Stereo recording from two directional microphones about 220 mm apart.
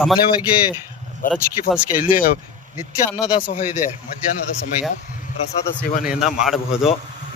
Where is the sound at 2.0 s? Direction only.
40° left (ahead or behind).